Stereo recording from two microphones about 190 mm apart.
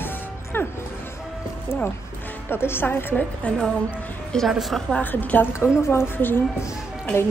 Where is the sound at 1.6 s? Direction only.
10° left (ahead or behind).